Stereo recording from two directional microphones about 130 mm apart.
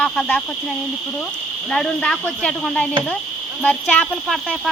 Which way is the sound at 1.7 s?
5° left (ahead or behind).